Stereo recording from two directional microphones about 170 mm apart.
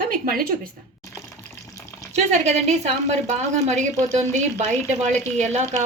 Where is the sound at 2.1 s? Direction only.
40° right (ahead or behind).